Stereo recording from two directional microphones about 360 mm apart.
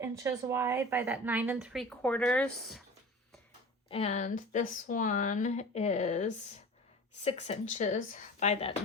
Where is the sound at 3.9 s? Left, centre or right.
Centre.